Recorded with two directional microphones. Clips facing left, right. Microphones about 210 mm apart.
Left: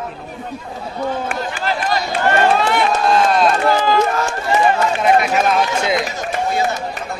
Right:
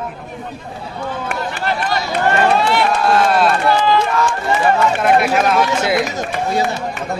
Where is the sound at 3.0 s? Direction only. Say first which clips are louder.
Even; 5° right (ahead or behind).